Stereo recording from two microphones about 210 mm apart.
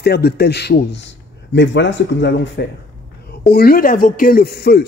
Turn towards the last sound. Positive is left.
turn(degrees=50)  # may be behind; listen again after turning